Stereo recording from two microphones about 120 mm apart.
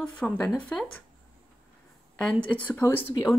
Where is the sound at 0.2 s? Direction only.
10° left (ahead or behind).